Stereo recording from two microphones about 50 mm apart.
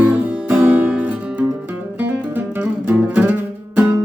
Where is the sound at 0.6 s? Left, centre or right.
Right.